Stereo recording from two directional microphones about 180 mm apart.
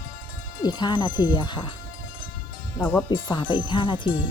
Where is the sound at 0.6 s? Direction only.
25° left (ahead or behind).